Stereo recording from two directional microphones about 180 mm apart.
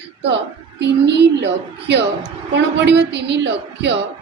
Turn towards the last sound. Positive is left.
turn(degrees=-75)  # may be behind; listen again after turning